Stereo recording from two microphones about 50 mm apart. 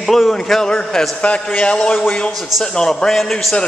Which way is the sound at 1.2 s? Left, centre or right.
Left.